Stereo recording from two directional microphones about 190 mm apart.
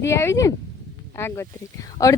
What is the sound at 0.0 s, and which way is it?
Speech, 15° left (ahead or behind).